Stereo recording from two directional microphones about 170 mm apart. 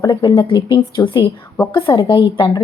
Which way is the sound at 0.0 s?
20° left (ahead or behind).